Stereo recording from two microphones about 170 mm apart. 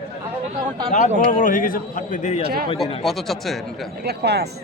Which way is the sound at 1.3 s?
50° left (ahead or behind).